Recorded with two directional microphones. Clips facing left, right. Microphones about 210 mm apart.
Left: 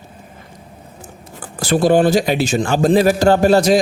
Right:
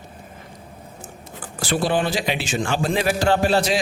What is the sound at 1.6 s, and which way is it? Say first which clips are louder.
A man's voice: left 8 dB; 40° left (ahead or behind).